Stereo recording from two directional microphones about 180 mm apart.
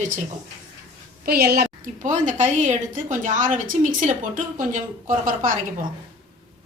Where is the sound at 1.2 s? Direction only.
60° right (ahead or behind).